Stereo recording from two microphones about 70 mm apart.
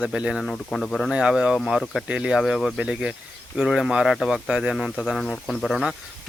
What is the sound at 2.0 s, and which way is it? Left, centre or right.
Speech, centre.